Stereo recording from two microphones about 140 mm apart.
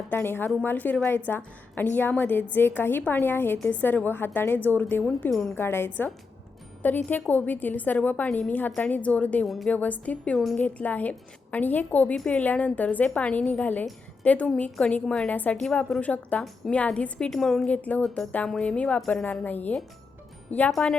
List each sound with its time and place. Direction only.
0.1 s a woman's voice: 15° left (ahead or behind)
5.3 s a woman's voice: centre (ahead or behind)
5.5 s a woman's voice: 15° left (ahead or behind)
9.5 s a woman's voice: centre (ahead or behind)
9.7 s a woman's voice: 10° left (ahead or behind)